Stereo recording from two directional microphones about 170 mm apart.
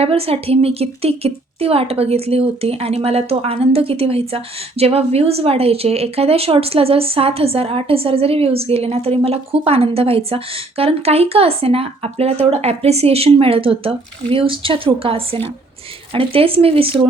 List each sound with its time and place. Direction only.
0.0 s a woman's voice: 35° right (ahead or behind)